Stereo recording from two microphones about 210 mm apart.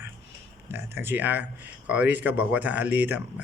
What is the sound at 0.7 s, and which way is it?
Speech, 10° right (ahead or behind).